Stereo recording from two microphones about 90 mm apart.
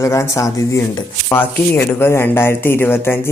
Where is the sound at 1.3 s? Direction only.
25° left (ahead or behind).